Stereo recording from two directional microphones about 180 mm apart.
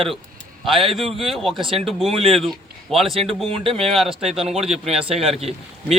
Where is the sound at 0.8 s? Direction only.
30° right (ahead or behind).